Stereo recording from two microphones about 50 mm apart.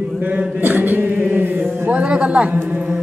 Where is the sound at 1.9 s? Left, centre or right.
Centre.